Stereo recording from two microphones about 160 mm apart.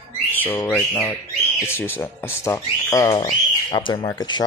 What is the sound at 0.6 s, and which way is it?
Speech, 15° left (ahead or behind).